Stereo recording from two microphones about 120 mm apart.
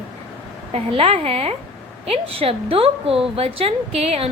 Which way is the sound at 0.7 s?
55° right (ahead or behind).